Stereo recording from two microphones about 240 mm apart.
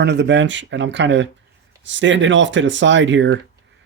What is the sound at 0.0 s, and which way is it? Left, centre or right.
Speech, right.